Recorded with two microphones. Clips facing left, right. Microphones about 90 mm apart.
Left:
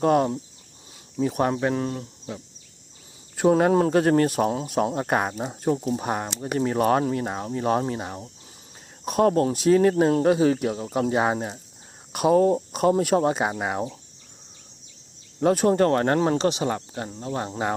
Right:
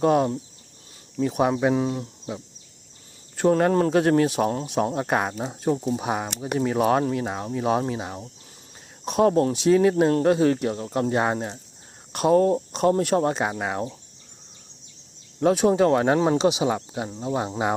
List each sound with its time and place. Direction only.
0.0 s speech: centre (ahead or behind)
3.3 s speech: 5° left (ahead or behind)
15.4 s speech: centre (ahead or behind)